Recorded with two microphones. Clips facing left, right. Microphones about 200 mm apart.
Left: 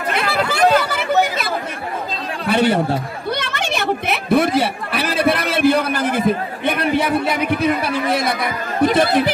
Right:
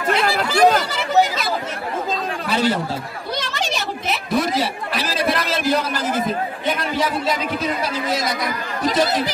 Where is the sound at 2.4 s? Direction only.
60° left (ahead or behind).